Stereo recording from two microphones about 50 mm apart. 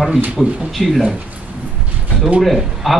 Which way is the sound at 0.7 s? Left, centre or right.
Centre.